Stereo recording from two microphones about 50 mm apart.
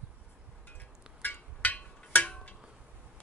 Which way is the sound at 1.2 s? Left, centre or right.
Left.